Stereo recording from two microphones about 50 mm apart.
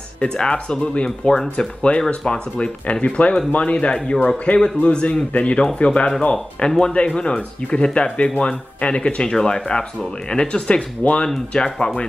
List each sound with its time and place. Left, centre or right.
0.2 s speech: centre